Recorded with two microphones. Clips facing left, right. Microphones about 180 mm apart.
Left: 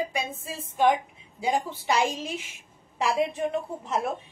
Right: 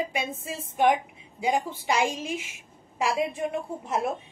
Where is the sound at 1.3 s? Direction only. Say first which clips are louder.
Right 1 dB; 15° right (ahead or behind).